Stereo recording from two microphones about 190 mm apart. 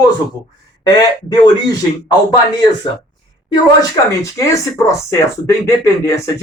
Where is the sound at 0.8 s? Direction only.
25° left (ahead or behind).